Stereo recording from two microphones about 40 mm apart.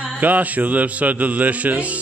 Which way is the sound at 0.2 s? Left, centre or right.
Right.